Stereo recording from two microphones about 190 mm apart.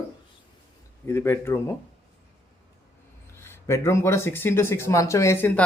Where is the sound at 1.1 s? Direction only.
15° left (ahead or behind).